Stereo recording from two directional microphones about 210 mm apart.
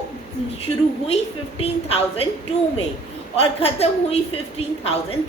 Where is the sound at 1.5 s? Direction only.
30° left (ahead or behind).